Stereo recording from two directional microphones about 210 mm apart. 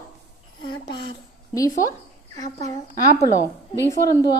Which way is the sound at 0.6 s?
25° left (ahead or behind).